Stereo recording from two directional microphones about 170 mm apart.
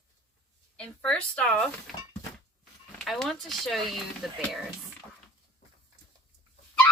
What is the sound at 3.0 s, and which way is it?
Speech, centre (ahead or behind).